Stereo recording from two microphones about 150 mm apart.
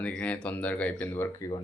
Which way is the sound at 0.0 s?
10° left (ahead or behind).